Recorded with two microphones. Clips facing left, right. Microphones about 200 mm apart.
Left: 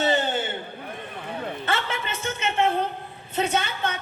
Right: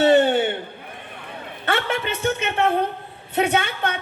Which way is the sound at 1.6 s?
65° right (ahead or behind).